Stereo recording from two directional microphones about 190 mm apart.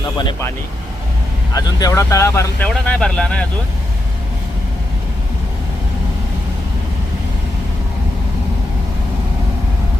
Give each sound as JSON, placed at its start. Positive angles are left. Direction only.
{"t": 0.2, "sound": "speech", "side_deg": 25}
{"t": 1.5, "sound": "speech", "side_deg": 20}